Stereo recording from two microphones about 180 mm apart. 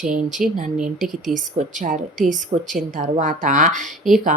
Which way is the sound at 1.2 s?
45° right (ahead or behind).